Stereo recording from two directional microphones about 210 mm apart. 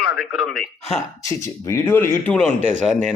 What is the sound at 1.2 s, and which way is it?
Speech, 15° left (ahead or behind).